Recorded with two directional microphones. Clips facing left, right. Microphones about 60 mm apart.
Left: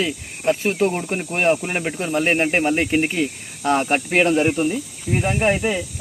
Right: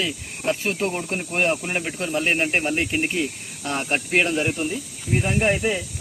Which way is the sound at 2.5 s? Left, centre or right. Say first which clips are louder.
Left 4 dB; left.